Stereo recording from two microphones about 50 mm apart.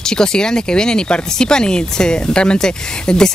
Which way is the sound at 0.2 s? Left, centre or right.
Centre.